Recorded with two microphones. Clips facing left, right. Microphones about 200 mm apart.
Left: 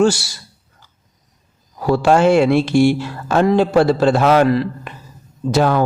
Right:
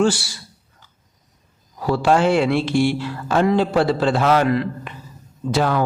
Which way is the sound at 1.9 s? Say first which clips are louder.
Left 4 dB; 45° left (ahead or behind).